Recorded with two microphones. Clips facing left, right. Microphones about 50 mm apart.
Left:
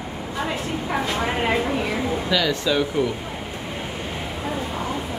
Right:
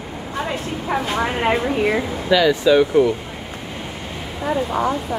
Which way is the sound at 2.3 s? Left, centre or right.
Centre.